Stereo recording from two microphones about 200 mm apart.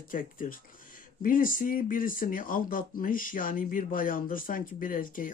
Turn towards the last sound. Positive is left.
turn(degrees=45)  # may be behind; listen again after turning